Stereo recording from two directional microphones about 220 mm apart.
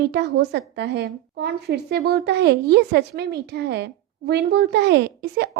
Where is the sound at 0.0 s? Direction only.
50° right (ahead or behind).